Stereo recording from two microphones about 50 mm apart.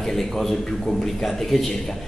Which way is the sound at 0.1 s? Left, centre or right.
Centre.